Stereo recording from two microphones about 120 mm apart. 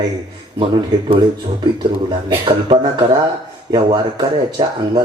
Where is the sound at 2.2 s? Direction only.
45° right (ahead or behind).